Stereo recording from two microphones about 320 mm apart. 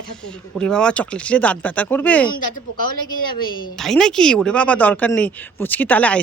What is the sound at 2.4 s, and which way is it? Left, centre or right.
Speech, left.